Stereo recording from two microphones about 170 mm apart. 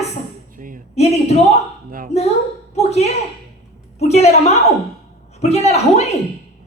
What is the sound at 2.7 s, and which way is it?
A woman's voice, 40° left (ahead or behind).